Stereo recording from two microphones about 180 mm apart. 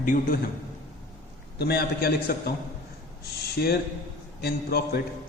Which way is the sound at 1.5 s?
65° left (ahead or behind).